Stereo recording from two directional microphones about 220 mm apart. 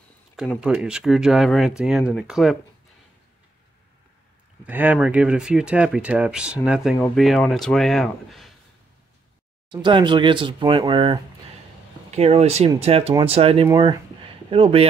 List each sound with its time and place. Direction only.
0.4 s speech: centre (ahead or behind)
4.6 s speech: 10° right (ahead or behind)
9.7 s speech: 20° right (ahead or behind)